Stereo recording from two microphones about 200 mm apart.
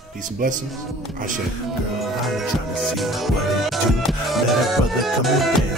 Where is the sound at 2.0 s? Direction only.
Centre (ahead or behind).